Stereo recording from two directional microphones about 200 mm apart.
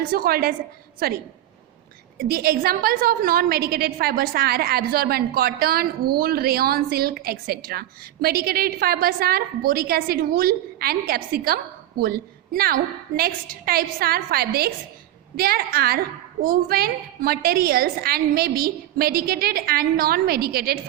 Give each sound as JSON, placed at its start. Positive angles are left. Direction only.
{"t": 0.0, "sound": "a woman's voice", "side_deg": -50}